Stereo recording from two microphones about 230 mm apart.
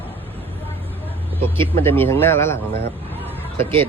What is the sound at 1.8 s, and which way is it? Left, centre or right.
Speech, centre.